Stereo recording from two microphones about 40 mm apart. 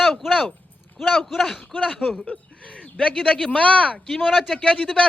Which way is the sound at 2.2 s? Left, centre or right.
Left.